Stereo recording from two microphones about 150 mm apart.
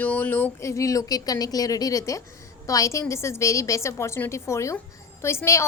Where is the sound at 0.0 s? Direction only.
10° left (ahead or behind).